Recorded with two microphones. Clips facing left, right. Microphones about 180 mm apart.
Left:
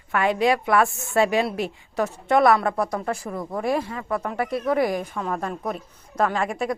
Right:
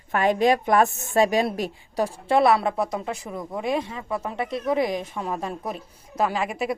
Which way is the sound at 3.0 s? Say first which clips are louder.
Left 3 dB; 10° right (ahead or behind).